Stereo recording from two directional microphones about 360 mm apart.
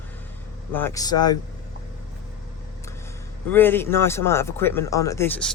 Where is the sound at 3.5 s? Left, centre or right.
Centre.